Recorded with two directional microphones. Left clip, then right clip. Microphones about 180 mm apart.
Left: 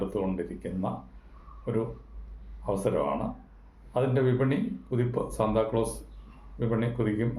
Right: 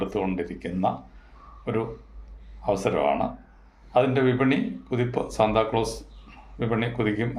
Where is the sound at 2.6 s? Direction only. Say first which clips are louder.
Right 5 dB; 15° right (ahead or behind).